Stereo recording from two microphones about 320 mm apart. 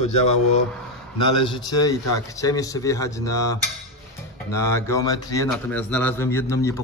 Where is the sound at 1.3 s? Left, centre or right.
Centre.